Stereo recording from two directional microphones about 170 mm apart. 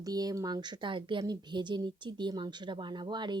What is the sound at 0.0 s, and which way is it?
A woman's voice, 20° right (ahead or behind).